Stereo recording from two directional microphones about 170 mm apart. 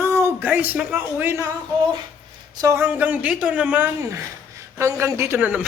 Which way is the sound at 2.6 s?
15° right (ahead or behind).